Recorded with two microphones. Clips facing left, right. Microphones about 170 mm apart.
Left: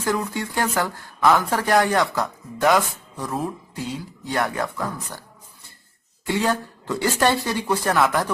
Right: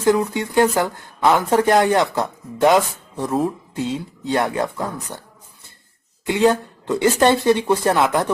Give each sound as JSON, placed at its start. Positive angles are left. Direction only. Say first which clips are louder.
{"t": 0.0, "sound": "speech", "louder": "right 7 dB", "side_deg": -20}
{"t": 6.2, "sound": "speech", "louder": "right 6 dB", "side_deg": -20}